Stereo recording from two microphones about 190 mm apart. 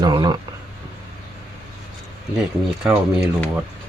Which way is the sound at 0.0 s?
20° right (ahead or behind).